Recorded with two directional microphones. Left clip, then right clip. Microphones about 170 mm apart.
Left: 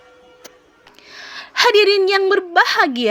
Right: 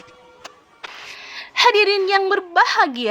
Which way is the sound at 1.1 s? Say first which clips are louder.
Left 2 dB; 35° left (ahead or behind).